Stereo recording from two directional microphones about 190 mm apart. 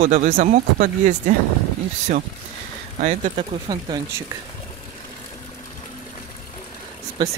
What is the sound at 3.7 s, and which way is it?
Speech, 20° right (ahead or behind).